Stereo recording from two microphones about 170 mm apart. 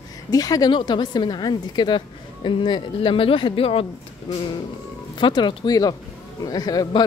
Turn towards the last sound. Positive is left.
turn(degrees=20)  # may be behind; listen again after turning